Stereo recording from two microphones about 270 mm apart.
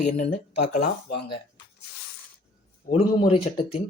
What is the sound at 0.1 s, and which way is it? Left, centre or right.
Speech, left.